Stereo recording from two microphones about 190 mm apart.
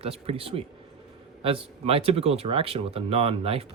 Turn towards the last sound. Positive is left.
turn(degrees=-30)  # may be behind; listen again after turning